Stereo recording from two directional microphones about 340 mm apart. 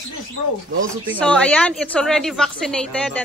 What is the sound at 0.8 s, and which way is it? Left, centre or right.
Speech, centre.